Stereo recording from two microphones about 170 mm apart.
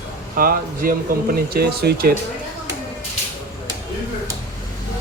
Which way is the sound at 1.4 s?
65° right (ahead or behind).